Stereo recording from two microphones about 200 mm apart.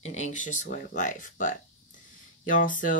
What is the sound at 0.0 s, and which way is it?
Speech, 35° left (ahead or behind).